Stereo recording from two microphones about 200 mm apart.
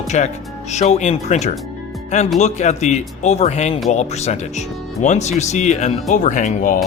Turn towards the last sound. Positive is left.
turn(degrees=40)  # may be behind; listen again after turning